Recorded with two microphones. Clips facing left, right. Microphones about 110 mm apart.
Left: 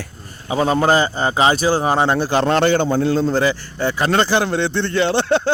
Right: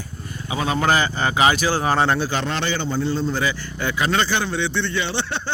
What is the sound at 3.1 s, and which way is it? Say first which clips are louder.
A man's voice: left 6 dB; 40° left (ahead or behind).